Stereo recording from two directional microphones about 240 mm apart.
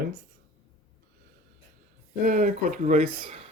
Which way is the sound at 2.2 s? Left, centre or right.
Right.